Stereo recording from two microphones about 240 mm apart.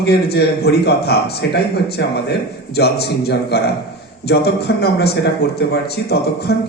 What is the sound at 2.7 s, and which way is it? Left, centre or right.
A man's voice, left.